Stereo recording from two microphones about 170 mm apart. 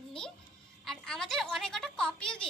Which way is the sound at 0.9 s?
5° left (ahead or behind).